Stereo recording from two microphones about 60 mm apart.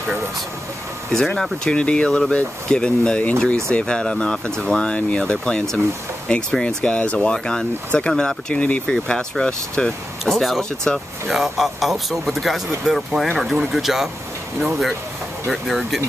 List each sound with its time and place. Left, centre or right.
1.3 s speech: centre
3.4 s speech: centre
8.9 s speech: centre
10.2 s speech: centre
10.6 s speech: centre
11.2 s speech: centre
15.4 s speech: centre